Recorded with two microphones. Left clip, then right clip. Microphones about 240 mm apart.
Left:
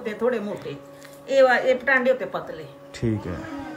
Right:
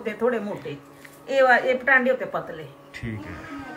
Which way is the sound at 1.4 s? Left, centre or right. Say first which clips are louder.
Even; centre.